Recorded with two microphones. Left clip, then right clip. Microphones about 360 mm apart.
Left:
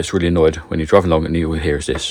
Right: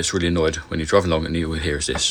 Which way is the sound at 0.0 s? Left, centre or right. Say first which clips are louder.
Left 6 dB; centre.